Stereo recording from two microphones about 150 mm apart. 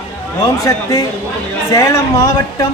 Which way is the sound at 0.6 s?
25° left (ahead or behind).